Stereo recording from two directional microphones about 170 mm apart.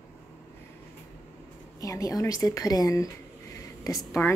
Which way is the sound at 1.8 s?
20° left (ahead or behind).